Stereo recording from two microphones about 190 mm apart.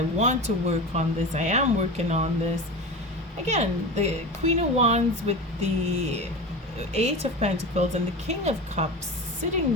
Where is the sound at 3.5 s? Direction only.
35° right (ahead or behind).